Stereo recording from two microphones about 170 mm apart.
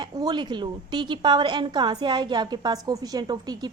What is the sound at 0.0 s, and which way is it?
A woman's voice, 25° right (ahead or behind).